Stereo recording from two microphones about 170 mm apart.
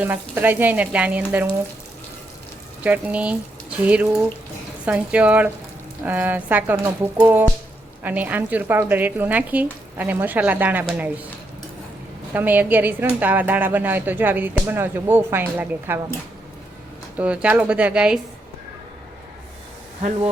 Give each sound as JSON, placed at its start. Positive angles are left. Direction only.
{"t": 0.0, "sound": "speech", "side_deg": -10}
{"t": 2.8, "sound": "speech", "side_deg": -10}
{"t": 12.3, "sound": "speech", "side_deg": -10}
{"t": 17.2, "sound": "speech", "side_deg": -10}
{"t": 20.0, "sound": "speech", "side_deg": -50}